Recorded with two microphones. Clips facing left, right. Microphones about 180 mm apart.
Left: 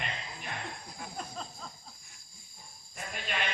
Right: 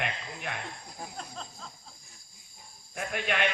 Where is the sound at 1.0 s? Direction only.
35° right (ahead or behind).